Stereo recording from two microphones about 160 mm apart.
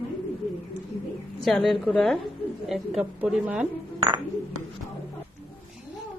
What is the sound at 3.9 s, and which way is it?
Music, 30° right (ahead or behind).